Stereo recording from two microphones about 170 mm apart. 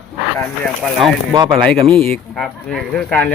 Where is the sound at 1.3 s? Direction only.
25° right (ahead or behind).